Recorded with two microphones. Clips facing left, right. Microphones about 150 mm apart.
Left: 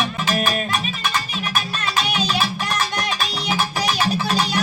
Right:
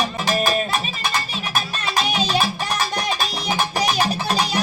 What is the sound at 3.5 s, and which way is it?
Music, 40° right (ahead or behind).